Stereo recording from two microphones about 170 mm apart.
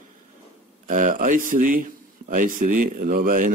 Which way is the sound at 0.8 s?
50° right (ahead or behind).